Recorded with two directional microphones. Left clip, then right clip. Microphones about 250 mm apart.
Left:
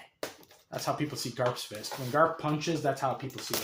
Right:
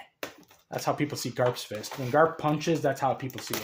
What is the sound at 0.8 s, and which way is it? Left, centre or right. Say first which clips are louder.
Speech: right 3 dB; right.